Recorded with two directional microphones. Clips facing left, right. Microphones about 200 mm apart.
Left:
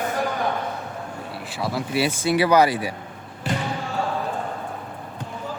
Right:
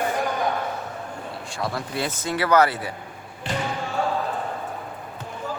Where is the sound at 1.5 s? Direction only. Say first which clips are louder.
Left 3 dB; 5° left (ahead or behind).